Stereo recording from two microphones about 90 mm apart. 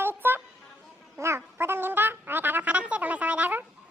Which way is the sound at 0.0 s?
25° right (ahead or behind).